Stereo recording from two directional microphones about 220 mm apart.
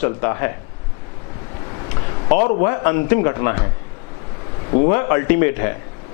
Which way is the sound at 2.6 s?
15° left (ahead or behind).